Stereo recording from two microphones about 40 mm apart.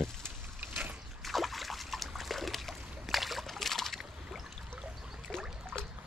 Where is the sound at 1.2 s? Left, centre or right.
Centre.